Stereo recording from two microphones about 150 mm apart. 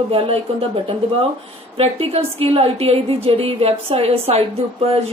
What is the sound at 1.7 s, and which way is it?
A woman's voice, 40° right (ahead or behind).